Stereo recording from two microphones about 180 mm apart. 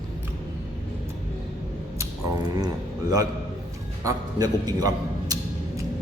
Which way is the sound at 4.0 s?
20° right (ahead or behind).